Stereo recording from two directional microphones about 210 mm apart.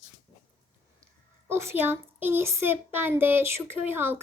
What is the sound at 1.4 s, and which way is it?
A child's voice, 10° right (ahead or behind).